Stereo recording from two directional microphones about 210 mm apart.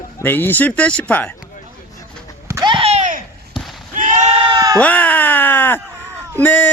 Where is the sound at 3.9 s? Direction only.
35° right (ahead or behind); by 4.8 s 20° right (ahead or behind).